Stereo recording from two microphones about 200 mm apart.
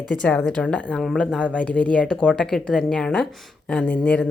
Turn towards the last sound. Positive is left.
turn(degrees=5)  # may be behind; listen again after turning